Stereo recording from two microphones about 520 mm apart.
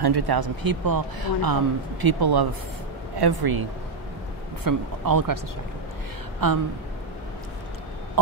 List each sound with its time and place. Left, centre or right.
0.0 s speech: right
4.6 s speech: right
6.4 s speech: right